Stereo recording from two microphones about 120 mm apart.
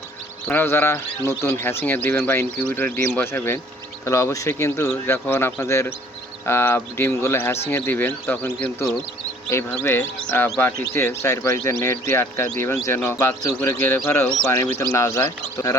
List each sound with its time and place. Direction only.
0.4 s speech: 15° left (ahead or behind)